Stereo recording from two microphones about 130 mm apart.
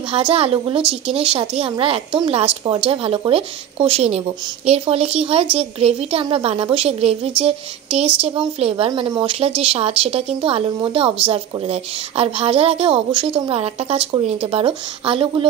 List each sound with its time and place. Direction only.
0.3 s a woman's voice: 50° right (ahead or behind)
9.0 s a woman's voice: 35° right (ahead or behind)